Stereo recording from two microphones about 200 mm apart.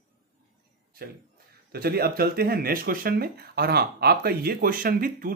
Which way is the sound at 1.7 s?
50° right (ahead or behind).